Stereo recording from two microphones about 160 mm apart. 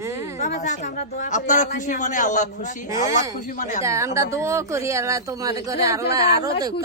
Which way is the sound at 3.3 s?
55° left (ahead or behind).